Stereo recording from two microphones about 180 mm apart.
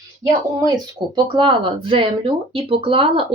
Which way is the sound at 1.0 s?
25° right (ahead or behind).